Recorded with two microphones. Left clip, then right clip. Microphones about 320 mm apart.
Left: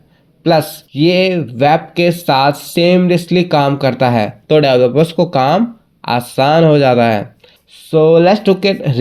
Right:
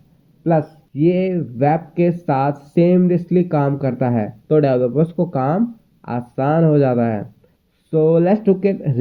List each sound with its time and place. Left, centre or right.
1.2 s speech: centre